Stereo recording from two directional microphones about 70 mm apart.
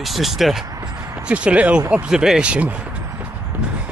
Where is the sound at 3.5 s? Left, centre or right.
Right.